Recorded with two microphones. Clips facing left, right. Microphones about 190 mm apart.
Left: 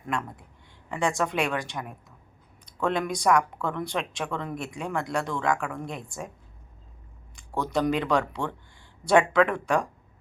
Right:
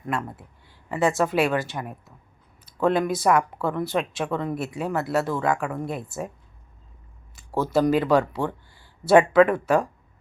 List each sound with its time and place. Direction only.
0.9 s a woman's voice: 5° right (ahead or behind)
2.6 s a sound: 5° right (ahead or behind)
3.1 s a woman's voice: 5° right (ahead or behind)
7.3 s a woman's voice: 5° right (ahead or behind)